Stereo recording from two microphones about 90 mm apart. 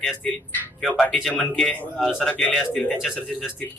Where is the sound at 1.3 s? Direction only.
15° left (ahead or behind).